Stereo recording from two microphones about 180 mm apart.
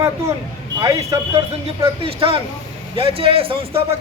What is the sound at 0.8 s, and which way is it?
Speech, 20° right (ahead or behind).